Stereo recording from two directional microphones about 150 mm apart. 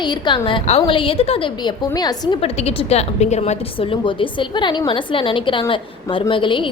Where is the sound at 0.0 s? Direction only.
30° left (ahead or behind).